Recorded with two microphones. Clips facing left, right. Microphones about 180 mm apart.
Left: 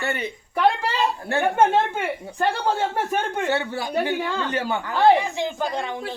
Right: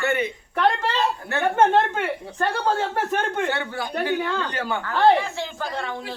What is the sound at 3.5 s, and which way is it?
A woman's voice, 25° left (ahead or behind).